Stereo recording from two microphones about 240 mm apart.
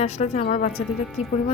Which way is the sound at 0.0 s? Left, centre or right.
Left.